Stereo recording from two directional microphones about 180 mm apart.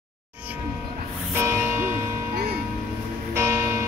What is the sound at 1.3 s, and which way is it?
Music, 15° right (ahead or behind).